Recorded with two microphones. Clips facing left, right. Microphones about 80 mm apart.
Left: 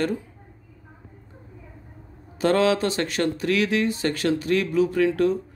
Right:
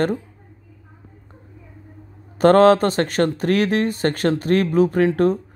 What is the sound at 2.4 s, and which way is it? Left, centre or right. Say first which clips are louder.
Speech: right 8 dB; right.